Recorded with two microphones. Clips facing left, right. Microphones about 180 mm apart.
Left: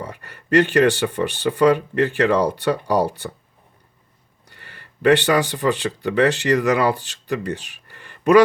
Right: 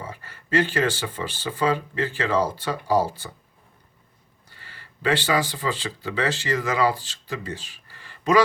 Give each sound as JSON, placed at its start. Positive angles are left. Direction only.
{"t": 0.0, "sound": "speech", "side_deg": 65}
{"t": 4.4, "sound": "speech", "side_deg": 60}